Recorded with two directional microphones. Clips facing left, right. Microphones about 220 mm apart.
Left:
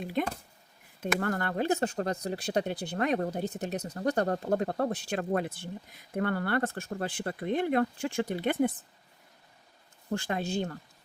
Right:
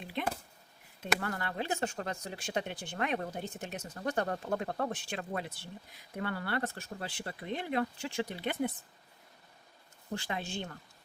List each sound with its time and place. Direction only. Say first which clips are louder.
0.0 s a sound: left 7 dB; 45° left (ahead or behind)
1.0 s speech: left 5 dB; 50° left (ahead or behind)
10.1 s speech: left 6 dB; 50° left (ahead or behind)